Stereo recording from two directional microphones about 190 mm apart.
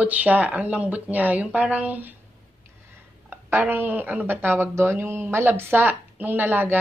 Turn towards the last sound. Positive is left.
turn(degrees=-10)  # may be behind; listen again after turning